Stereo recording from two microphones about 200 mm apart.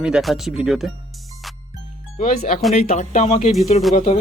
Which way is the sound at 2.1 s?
40° left (ahead or behind).